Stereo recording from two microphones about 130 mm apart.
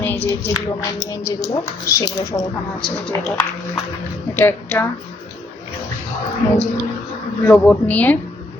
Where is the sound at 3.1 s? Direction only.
15° left (ahead or behind).